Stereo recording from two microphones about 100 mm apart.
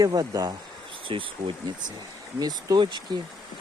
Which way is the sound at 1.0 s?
60° right (ahead or behind).